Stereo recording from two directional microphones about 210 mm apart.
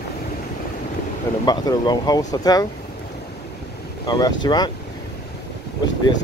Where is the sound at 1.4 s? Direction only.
20° left (ahead or behind).